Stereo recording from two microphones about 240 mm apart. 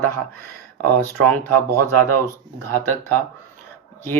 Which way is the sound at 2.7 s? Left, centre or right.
Centre.